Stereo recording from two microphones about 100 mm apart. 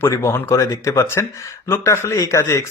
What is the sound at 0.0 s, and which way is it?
Speech, 25° left (ahead or behind).